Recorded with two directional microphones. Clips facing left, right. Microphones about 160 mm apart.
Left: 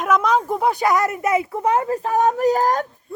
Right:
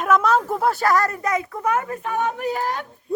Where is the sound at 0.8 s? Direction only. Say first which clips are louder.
Left 1 dB; 20° left (ahead or behind); by 2.8 s 40° left (ahead or behind).